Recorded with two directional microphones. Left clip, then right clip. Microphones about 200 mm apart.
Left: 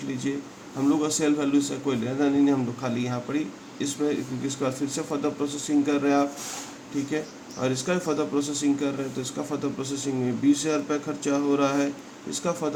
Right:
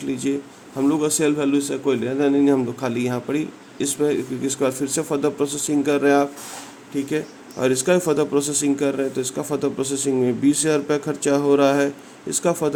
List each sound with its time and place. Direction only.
0.8 s a man's voice: 40° right (ahead or behind)
7.6 s a man's voice: 40° right (ahead or behind)